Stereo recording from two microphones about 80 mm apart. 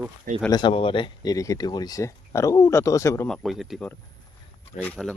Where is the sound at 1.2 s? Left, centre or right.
Left.